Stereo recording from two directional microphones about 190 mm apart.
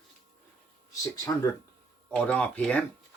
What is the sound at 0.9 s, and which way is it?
Speech, 15° left (ahead or behind).